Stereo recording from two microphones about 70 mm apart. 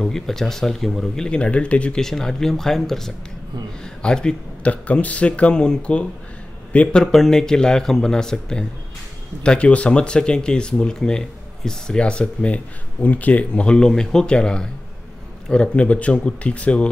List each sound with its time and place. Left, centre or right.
0.0 s a man's voice: centre
7.0 s speech: centre